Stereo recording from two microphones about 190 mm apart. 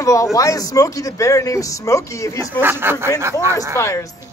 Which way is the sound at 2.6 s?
10° right (ahead or behind).